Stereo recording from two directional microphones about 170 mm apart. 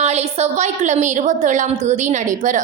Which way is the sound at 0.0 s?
40° right (ahead or behind).